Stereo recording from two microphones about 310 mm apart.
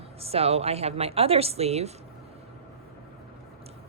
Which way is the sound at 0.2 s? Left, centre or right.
Centre.